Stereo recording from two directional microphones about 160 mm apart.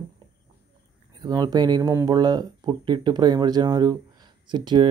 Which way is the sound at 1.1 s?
25° right (ahead or behind).